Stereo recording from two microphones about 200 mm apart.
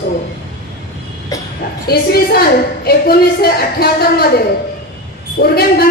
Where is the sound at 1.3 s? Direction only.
15° left (ahead or behind).